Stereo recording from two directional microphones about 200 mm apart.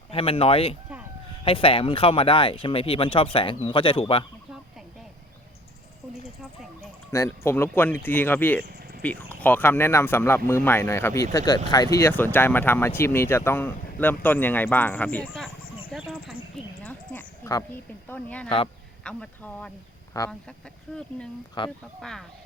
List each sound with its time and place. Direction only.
0.1 s speech: 30° left (ahead or behind)
7.1 s speech: 15° left (ahead or behind)
15.9 s a sound: 5° right (ahead or behind)
16.8 s a sound: 10° left (ahead or behind)
18.1 s speech: 5° left (ahead or behind)
18.4 s speech: 25° left (ahead or behind)
19.0 s speech: 5° left (ahead or behind)
20.1 s speech: 20° left (ahead or behind)
21.6 s speech: 25° left (ahead or behind)